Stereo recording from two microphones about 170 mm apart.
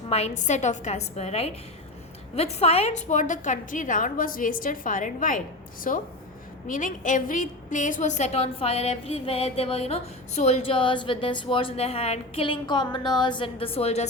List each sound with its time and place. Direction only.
0.1 s a woman's voice: 40° left (ahead or behind)